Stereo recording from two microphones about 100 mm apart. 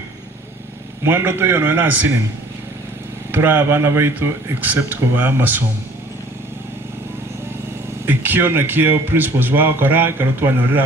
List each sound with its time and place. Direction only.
1.0 s speech: 20° right (ahead or behind)
3.3 s speech: 20° right (ahead or behind)
8.0 s speech: 20° right (ahead or behind)